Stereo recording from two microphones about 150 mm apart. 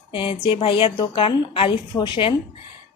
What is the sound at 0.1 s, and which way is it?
Speech, 35° left (ahead or behind).